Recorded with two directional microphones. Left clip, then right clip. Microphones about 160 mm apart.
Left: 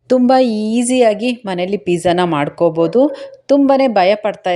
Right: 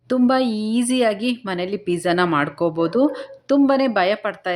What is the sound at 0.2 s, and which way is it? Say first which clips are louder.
A woman's voice: left 4 dB; 30° left (ahead or behind).